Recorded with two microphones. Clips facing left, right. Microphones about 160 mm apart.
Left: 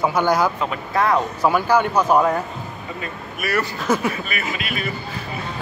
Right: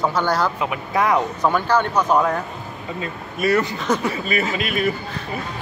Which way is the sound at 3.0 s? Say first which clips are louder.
Right 7 dB; 25° right (ahead or behind).